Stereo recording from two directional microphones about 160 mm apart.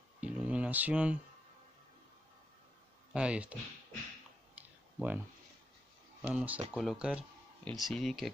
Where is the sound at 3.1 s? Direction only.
5° right (ahead or behind).